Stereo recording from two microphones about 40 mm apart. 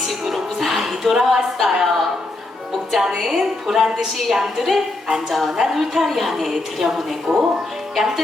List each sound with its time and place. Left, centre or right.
0.3 s music: centre
1.1 s a woman's voice: centre
1.8 s a sound: centre
3.2 s a woman's voice: centre
7.3 s speech: centre
7.9 s a woman's voice: centre